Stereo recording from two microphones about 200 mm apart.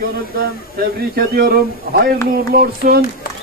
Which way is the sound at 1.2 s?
50° right (ahead or behind).